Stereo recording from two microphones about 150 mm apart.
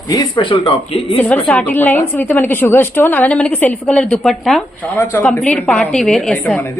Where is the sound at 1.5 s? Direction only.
10° left (ahead or behind).